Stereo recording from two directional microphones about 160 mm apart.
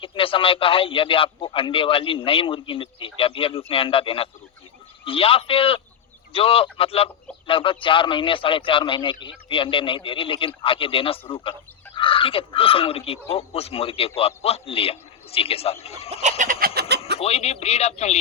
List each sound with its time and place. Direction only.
0.0 s a man's voice: 35° left (ahead or behind)
16.4 s chicken: 60° right (ahead or behind)
17.2 s a man's voice: 40° left (ahead or behind)